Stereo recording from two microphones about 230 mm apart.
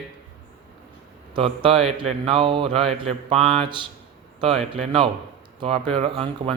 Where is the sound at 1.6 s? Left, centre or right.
Right.